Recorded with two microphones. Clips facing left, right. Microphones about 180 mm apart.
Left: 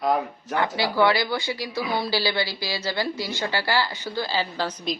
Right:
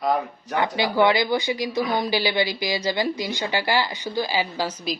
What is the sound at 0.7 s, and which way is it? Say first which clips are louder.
A woman's voice: right 2 dB; 20° right (ahead or behind).